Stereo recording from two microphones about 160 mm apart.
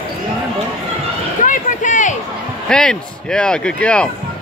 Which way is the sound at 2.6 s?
5° left (ahead or behind).